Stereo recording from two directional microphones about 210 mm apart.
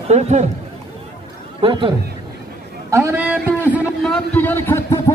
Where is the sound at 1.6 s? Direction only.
25° right (ahead or behind).